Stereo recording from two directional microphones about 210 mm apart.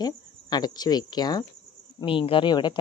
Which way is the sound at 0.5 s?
20° left (ahead or behind).